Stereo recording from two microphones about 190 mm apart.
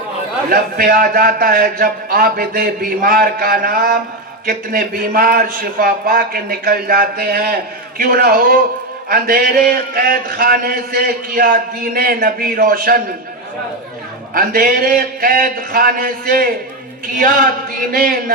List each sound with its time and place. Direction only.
0.5 s a man's voice: 50° right (ahead or behind)
14.3 s a man's voice: 50° right (ahead or behind)